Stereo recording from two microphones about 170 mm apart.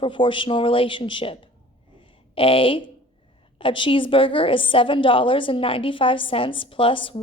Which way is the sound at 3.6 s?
30° left (ahead or behind).